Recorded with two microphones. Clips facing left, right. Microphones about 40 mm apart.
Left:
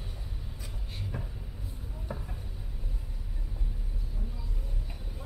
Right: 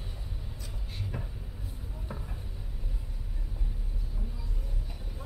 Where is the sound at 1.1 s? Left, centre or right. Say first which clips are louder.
Even; centre.